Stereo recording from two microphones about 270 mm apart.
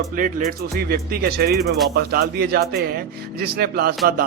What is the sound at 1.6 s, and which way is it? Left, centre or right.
Speech, centre.